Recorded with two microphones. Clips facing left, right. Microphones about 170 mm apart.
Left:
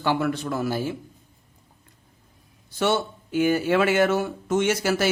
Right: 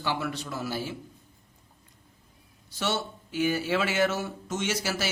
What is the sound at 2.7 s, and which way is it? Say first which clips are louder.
A man's voice: left 7 dB; 55° left (ahead or behind).